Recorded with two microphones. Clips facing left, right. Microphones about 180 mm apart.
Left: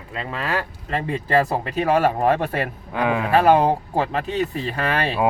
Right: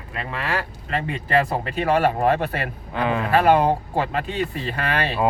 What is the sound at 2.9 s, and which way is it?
Speech, 10° left (ahead or behind).